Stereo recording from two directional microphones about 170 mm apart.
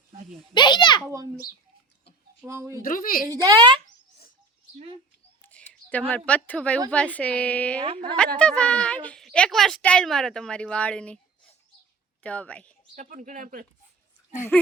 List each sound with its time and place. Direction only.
0.5 s a child's voice: 25° left (ahead or behind)
2.4 s speech: 15° right (ahead or behind)
2.8 s a woman's voice: 55° left (ahead or behind)
3.2 s speech: 25° right (ahead or behind)
5.4 s a sound: 10° left (ahead or behind)
6.1 s a woman's voice: 10° left (ahead or behind)
12.2 s a woman's voice: 10° left (ahead or behind)
13.0 s speech: 50° right (ahead or behind)
14.5 s a woman's voice: 10° left (ahead or behind)